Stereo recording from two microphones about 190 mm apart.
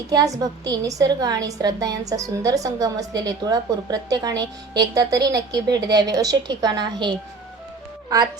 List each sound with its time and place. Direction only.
0.1 s a woman's voice: 20° right (ahead or behind)